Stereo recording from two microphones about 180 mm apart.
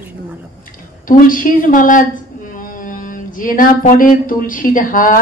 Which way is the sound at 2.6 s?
50° left (ahead or behind).